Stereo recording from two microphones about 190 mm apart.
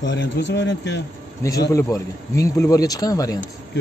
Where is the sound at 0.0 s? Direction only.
70° left (ahead or behind).